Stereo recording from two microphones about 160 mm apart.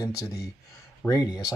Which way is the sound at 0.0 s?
20° left (ahead or behind).